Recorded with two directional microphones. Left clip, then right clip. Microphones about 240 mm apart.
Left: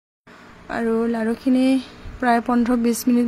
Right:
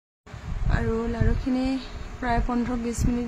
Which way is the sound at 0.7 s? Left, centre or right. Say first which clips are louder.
Left 7 dB; left.